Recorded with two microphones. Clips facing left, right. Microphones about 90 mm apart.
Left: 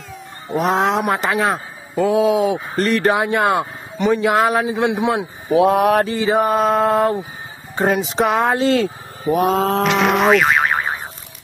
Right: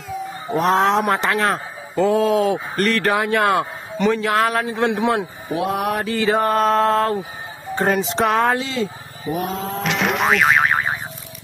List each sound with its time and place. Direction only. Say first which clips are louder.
0.5 s a man's voice: even; centre (ahead or behind)
2.2 s speech: left 1 dB; 15° left (ahead or behind)
6.0 s speech: left 1 dB; 15° left (ahead or behind)
7.8 s a man's voice: left 2 dB; centre (ahead or behind)
8.7 s speech: left 5 dB; 80° left
9.8 s a man's voice: left 2 dB; centre (ahead or behind)